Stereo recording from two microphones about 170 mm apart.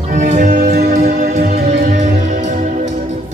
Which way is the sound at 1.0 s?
45° right (ahead or behind).